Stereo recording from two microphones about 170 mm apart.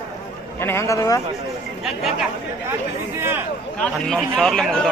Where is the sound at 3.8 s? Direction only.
5° left (ahead or behind).